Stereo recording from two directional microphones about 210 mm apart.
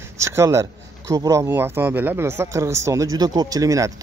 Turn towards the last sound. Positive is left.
turn(degrees=-15)  # may be behind; listen again after turning